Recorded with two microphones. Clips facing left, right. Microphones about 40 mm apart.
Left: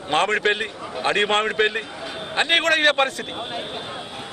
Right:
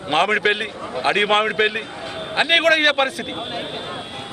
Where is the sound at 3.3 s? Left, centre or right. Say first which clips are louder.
Right 2 dB; centre.